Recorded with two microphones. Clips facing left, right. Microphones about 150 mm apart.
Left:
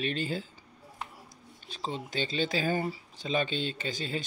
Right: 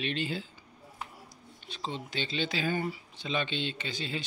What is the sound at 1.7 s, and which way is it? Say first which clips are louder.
Speech: left 2 dB; 40° left (ahead or behind).